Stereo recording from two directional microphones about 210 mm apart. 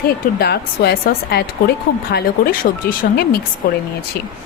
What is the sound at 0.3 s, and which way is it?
A woman's voice, 50° left (ahead or behind).